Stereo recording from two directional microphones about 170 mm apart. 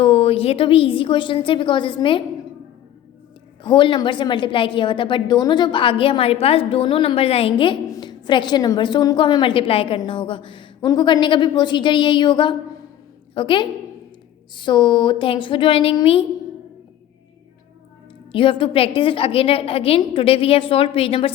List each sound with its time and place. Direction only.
0.0 s a woman's voice: 35° left (ahead or behind)
3.6 s a woman's voice: 30° left (ahead or behind)
18.3 s a woman's voice: 30° left (ahead or behind)